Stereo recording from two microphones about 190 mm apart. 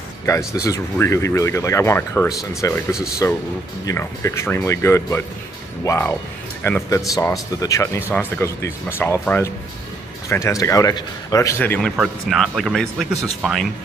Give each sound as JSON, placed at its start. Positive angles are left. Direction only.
{"t": 0.7, "sound": "a man's voice", "side_deg": 15}